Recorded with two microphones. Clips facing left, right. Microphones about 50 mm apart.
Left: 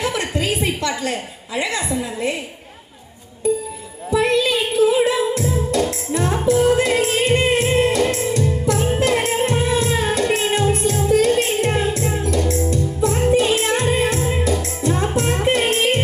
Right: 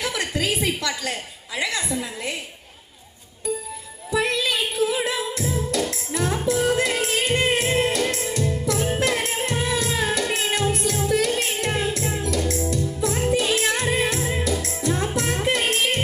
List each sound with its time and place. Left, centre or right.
0.0 s a sound: left
1.5 s a woman's voice: left
4.2 s music: left